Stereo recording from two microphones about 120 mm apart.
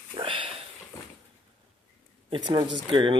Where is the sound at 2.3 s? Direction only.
40° right (ahead or behind).